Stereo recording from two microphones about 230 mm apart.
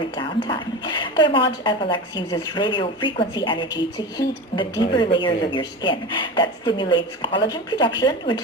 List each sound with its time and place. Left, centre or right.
0.2 s a woman's voice: centre